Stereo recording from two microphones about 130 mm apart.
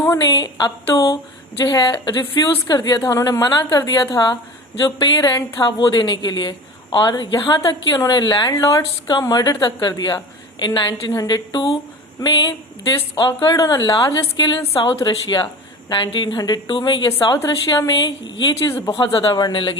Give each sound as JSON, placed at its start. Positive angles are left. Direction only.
{"t": 0.0, "sound": "a woman's voice", "side_deg": 25}